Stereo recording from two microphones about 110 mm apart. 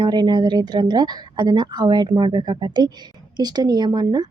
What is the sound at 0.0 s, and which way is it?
Speech, 40° right (ahead or behind).